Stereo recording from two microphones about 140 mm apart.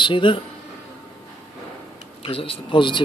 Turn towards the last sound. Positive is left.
turn(degrees=35)  # may be behind; listen again after turning